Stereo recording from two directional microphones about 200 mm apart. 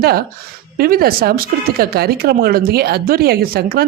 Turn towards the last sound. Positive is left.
turn(degrees=-50)  # may be behind; listen again after turning